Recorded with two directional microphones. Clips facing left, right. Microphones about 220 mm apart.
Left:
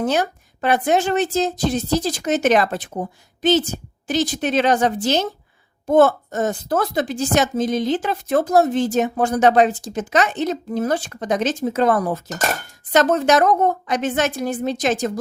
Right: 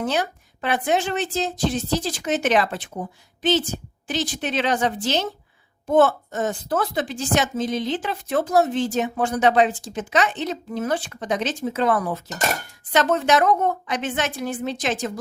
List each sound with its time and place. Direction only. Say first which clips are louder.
0.0 s a woman's voice: left 4 dB; 45° left (ahead or behind)